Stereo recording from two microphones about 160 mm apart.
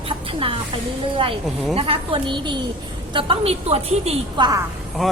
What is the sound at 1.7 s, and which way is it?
A woman's voice, 30° right (ahead or behind).